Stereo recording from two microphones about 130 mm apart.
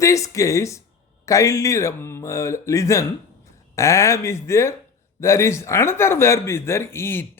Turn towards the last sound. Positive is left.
turn(degrees=20)  # may be behind; listen again after turning